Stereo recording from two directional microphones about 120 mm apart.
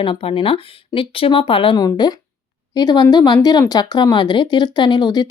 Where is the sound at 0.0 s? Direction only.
50° left (ahead or behind).